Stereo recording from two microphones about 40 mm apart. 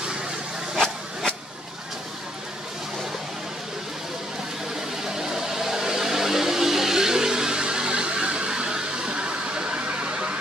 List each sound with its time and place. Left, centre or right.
5.0 s vehicle: centre; by 10.3 s right